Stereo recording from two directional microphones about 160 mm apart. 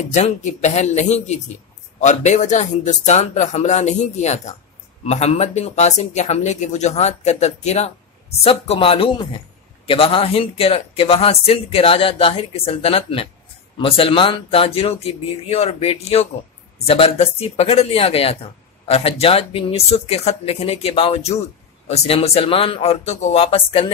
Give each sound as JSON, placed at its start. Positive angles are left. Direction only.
{"t": 0.1, "sound": "speech", "side_deg": 45}